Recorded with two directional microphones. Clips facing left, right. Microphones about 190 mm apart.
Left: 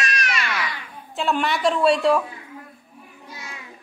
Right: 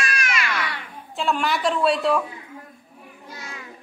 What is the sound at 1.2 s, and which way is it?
A woman's voice, centre (ahead or behind).